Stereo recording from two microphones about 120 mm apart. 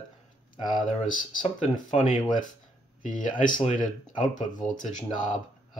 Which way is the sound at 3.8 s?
90° left.